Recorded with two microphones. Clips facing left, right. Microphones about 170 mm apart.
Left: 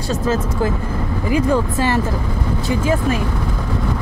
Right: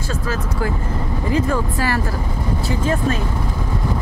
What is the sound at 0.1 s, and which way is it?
Speech, 20° left (ahead or behind).